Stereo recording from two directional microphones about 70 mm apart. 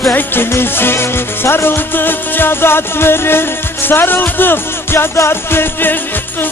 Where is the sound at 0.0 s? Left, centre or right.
Left.